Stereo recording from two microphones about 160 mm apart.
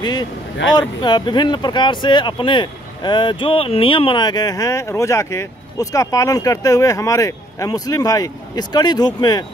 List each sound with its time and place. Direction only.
0.0 s speech: 25° left (ahead or behind)